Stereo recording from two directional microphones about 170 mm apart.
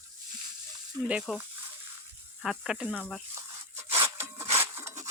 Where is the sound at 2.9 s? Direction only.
10° left (ahead or behind).